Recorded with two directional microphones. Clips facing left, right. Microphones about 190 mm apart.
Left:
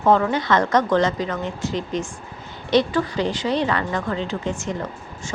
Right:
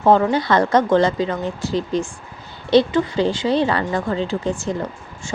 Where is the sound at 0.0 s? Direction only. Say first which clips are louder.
Right 3 dB; 30° right (ahead or behind).